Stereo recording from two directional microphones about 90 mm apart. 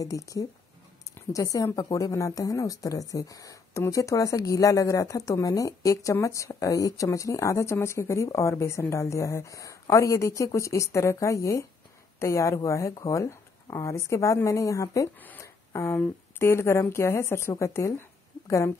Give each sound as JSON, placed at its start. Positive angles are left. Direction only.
{"t": 0.0, "sound": "a woman's voice", "side_deg": 40}
{"t": 15.4, "sound": "a sound", "side_deg": 30}
{"t": 16.3, "sound": "speech", "side_deg": 30}